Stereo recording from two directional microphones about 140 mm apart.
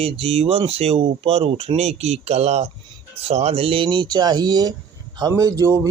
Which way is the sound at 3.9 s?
30° right (ahead or behind).